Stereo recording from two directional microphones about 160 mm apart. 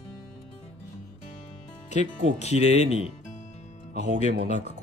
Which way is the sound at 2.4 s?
45° left (ahead or behind).